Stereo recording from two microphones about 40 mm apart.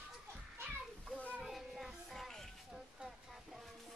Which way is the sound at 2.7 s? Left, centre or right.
Centre.